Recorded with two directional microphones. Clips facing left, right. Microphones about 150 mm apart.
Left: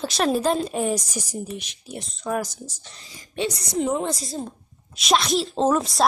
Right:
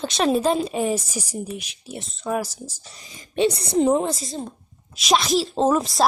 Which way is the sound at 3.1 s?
20° right (ahead or behind).